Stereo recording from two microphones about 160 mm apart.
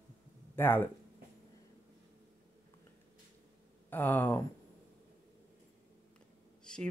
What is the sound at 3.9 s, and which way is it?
Speech, 10° left (ahead or behind).